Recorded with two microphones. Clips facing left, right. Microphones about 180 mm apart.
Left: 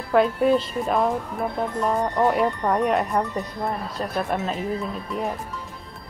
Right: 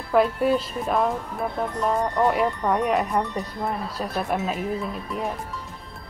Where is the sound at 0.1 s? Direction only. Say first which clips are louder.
Left 1 dB; centre (ahead or behind).